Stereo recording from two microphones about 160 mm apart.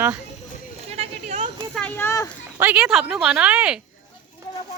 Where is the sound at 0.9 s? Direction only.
40° right (ahead or behind).